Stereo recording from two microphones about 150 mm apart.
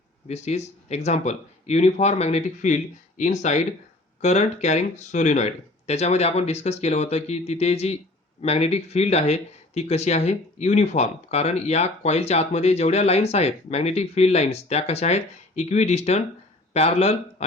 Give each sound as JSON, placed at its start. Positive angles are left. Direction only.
{"t": 0.3, "sound": "speech", "side_deg": 50}